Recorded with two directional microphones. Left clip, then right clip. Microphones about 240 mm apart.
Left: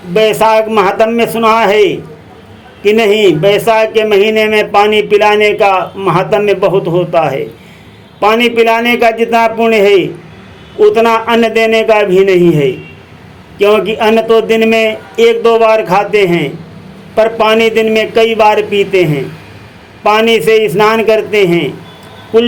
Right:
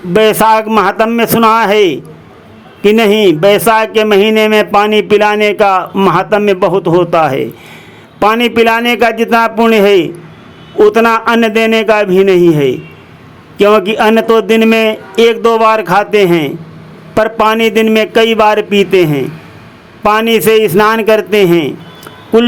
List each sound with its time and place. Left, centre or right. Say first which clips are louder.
0.1 s speech: right 1 dB; right